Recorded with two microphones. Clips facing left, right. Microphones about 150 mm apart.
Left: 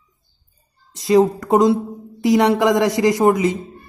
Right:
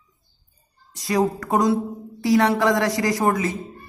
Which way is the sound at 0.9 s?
25° left (ahead or behind).